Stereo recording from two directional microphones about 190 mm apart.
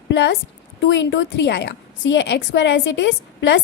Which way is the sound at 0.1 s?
70° left (ahead or behind).